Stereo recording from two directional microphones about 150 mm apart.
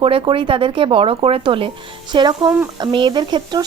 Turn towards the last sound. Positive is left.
turn(degrees=-30)  # may be behind; listen again after turning